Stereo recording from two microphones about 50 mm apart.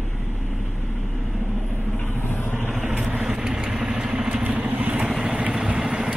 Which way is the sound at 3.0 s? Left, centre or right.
Centre.